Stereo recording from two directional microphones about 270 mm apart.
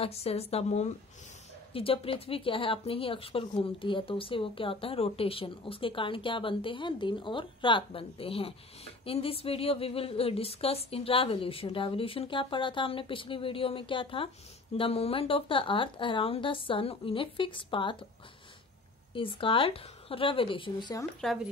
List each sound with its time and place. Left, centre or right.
0.0 s speech: left
19.1 s speech: centre
21.2 s speech: centre